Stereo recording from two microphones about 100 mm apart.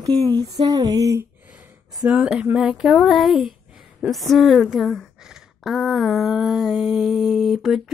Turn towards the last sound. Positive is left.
turn(degrees=0)  # may be behind; listen again after turning